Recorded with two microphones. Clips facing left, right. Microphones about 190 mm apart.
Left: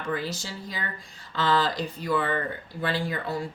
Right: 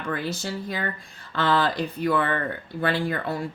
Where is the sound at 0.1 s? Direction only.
60° right (ahead or behind).